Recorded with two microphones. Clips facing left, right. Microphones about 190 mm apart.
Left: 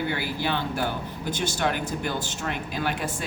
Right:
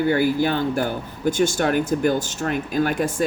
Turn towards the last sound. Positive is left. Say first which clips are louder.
# right 8 dB
turn(degrees=-45)  # may be behind; listen again after turning